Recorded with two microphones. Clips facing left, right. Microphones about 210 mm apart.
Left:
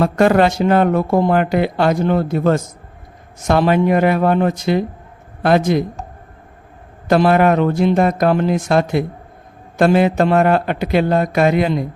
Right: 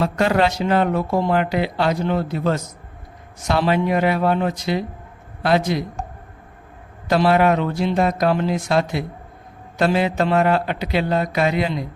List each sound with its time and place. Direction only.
0.0 s speech: 50° left (ahead or behind)
7.1 s speech: 50° left (ahead or behind)